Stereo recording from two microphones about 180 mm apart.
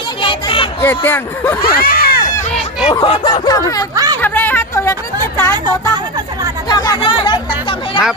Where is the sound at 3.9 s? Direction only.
20° right (ahead or behind).